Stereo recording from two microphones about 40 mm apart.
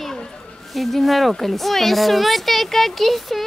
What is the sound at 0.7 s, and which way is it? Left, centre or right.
Speech, centre.